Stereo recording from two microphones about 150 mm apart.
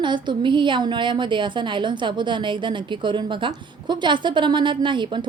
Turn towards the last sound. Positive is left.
turn(degrees=-30)  # may be behind; listen again after turning